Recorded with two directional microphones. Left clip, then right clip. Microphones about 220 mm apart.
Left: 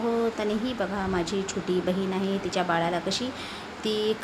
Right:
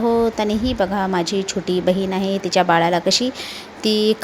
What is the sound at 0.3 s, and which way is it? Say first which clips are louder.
A woman's voice: right 8 dB; 25° right (ahead or behind).